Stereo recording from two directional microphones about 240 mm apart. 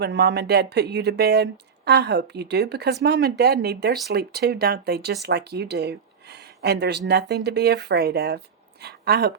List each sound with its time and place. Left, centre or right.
0.0 s speech: right